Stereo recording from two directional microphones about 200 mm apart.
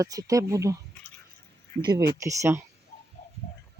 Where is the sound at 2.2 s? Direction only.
15° right (ahead or behind).